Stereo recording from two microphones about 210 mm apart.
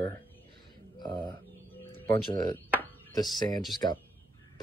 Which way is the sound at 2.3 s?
20° left (ahead or behind).